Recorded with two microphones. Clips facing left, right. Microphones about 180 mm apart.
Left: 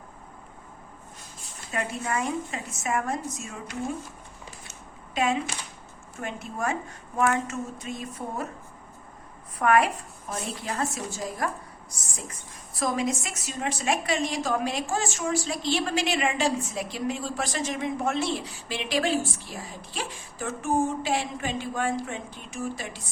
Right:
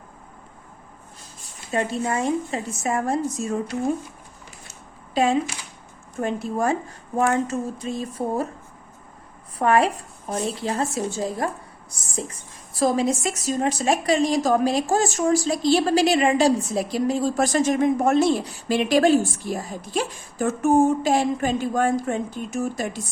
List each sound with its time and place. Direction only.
1.7 s a woman's voice: 30° right (ahead or behind)
4.7 s a sound: 35° right (ahead or behind)
6.1 s a woman's voice: 35° right (ahead or behind)
9.6 s a woman's voice: 30° right (ahead or behind)